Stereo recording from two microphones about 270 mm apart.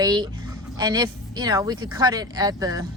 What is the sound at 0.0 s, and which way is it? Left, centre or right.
Speech, centre.